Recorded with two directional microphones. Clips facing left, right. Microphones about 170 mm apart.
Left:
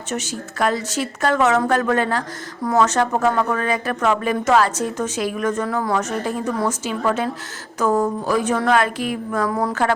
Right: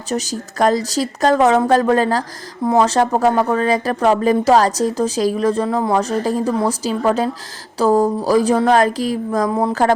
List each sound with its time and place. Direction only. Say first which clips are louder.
0.1 s speech: right 5 dB; 35° right (ahead or behind)
9.5 s speech: right 4 dB; 20° right (ahead or behind)